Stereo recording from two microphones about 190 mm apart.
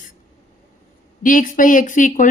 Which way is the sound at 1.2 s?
45° left (ahead or behind).